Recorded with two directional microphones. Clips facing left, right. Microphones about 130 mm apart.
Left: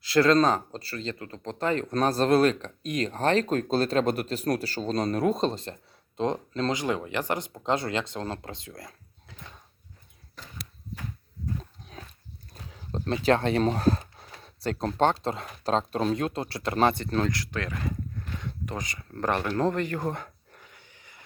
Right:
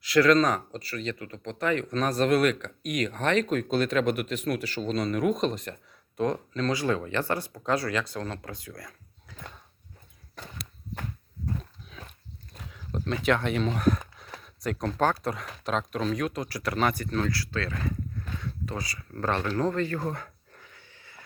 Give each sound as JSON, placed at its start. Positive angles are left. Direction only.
{"t": 0.0, "sound": "speech", "side_deg": 30}
{"t": 12.7, "sound": "speech", "side_deg": 30}
{"t": 19.5, "sound": "a sound", "side_deg": 20}